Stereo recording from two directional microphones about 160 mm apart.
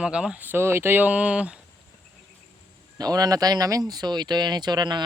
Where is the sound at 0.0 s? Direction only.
5° right (ahead or behind).